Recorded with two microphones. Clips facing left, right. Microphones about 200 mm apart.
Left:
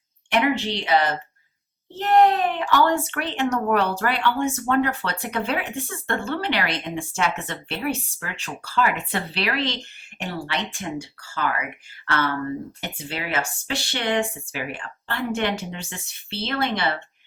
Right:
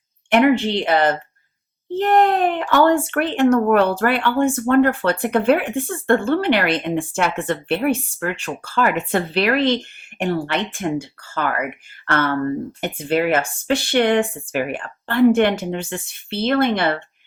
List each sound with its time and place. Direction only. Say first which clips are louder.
0.3 s speech: right 7 dB; 55° right (ahead or behind)